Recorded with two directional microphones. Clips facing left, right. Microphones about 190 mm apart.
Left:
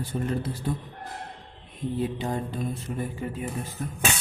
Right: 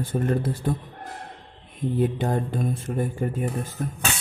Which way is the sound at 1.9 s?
55° right (ahead or behind).